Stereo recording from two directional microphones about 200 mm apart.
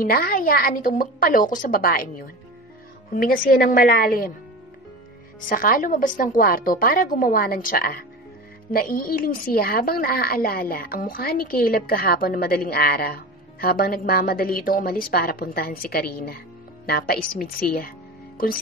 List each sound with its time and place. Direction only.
0.0 s a woman's voice: 45° left (ahead or behind)
5.5 s a woman's voice: 45° left (ahead or behind)